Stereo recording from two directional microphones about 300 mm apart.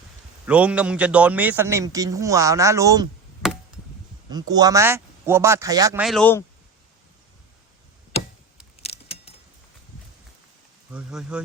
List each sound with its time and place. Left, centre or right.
0.4 s a man's voice: centre
4.3 s a man's voice: centre
8.8 s keys jangling: centre
10.9 s speech: centre